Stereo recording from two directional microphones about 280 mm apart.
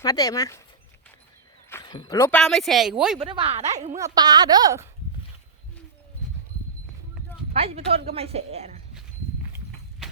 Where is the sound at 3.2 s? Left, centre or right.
Right.